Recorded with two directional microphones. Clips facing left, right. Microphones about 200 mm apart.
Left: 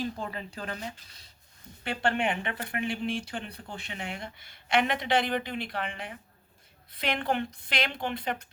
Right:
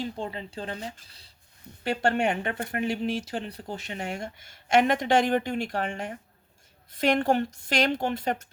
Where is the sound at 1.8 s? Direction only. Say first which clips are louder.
Right 4 dB; 40° right (ahead or behind).